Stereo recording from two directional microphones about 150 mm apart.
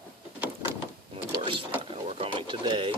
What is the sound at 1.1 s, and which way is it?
Mechanisms, 35° right (ahead or behind).